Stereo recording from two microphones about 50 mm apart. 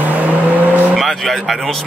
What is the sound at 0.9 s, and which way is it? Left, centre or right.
Speech, centre.